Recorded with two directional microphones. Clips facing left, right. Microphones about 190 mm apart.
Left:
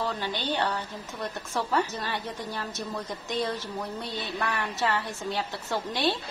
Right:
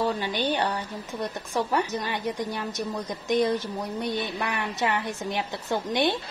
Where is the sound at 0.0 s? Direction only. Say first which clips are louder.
Right 5 dB; 15° right (ahead or behind).